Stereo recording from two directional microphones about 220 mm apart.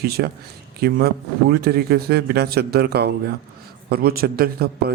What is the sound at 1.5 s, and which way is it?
Speech, 45° right (ahead or behind).